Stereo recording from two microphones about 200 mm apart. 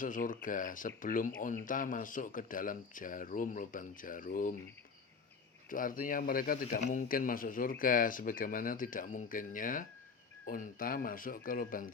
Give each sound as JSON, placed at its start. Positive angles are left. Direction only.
{"t": 0.0, "sound": "speech", "side_deg": 40}
{"t": 5.6, "sound": "speech", "side_deg": 45}